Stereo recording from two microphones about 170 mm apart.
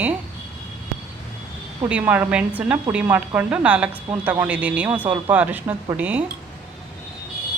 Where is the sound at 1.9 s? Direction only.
10° right (ahead or behind).